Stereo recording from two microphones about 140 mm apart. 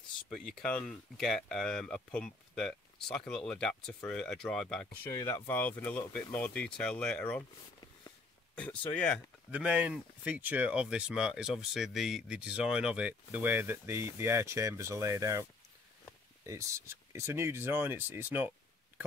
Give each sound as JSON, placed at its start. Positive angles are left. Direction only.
{"t": 0.3, "sound": "speech", "side_deg": 5}
{"t": 5.1, "sound": "speech", "side_deg": 20}
{"t": 8.5, "sound": "speech", "side_deg": 10}
{"t": 9.5, "sound": "speech", "side_deg": -10}
{"t": 16.4, "sound": "speech", "side_deg": -20}